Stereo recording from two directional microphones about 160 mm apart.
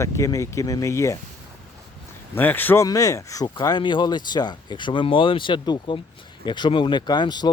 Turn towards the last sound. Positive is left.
turn(degrees=25)  # may be behind; listen again after turning